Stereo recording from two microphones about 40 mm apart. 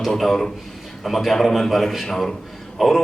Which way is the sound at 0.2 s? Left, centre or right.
Centre.